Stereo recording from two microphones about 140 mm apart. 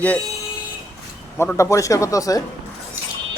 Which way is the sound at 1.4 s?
20° left (ahead or behind).